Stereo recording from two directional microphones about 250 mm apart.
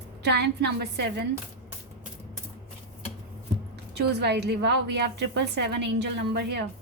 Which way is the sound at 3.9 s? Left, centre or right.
Right.